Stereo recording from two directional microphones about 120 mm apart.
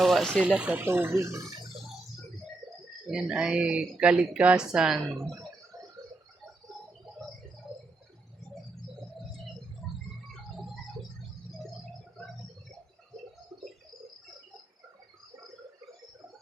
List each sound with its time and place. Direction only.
0.0 s speech: centre (ahead or behind)
0.4 s speech: 10° right (ahead or behind)
3.1 s speech: 5° right (ahead or behind)
7.0 s a sound: centre (ahead or behind)